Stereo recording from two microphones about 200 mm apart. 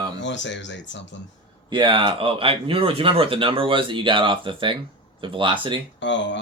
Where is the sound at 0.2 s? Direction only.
65° left (ahead or behind).